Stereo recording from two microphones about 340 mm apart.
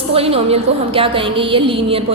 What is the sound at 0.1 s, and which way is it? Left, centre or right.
A woman's voice, centre.